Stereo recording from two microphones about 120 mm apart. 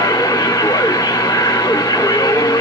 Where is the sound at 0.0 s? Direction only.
30° left (ahead or behind).